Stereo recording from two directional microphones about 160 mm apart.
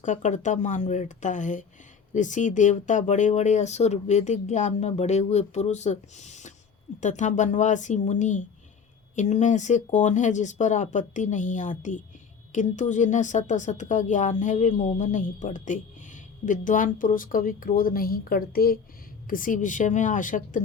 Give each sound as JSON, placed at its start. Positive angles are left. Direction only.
{"t": 0.0, "sound": "a woman's voice", "side_deg": 50}
{"t": 19.3, "sound": "a woman's voice", "side_deg": 55}